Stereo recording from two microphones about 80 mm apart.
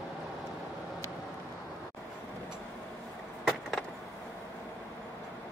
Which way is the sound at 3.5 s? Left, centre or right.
Centre.